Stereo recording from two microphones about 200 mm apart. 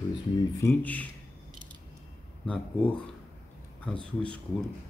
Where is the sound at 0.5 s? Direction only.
10° left (ahead or behind).